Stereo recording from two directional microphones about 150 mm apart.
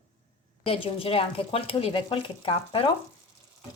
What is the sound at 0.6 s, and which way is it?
Speech, 35° left (ahead or behind).